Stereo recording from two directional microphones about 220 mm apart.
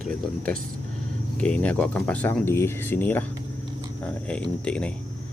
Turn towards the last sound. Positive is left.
turn(degrees=5)  # may be behind; listen again after turning